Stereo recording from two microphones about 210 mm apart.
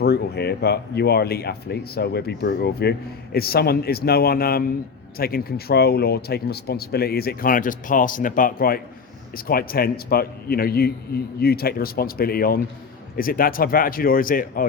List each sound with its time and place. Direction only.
0.0 s speech: 50° left (ahead or behind)